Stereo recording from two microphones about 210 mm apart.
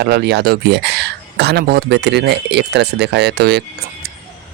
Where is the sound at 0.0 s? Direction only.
50° right (ahead or behind).